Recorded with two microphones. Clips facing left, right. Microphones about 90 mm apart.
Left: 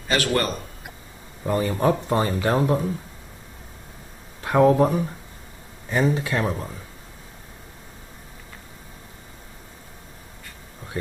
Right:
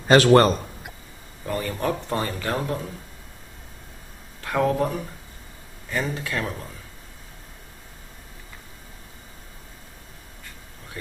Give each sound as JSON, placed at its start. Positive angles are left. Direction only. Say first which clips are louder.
{"t": 0.1, "sound": "speech", "louder": "right 8 dB", "side_deg": -40}
{"t": 1.4, "sound": "speech", "louder": "left 5 dB", "side_deg": 20}
{"t": 4.4, "sound": "speech", "louder": "left 6 dB", "side_deg": 25}
{"t": 6.4, "sound": "speech", "louder": "left 5 dB", "side_deg": 25}